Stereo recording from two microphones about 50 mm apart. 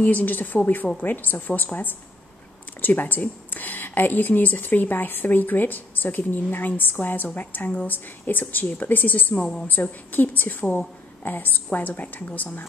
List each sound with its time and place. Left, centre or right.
0.0 s speech: left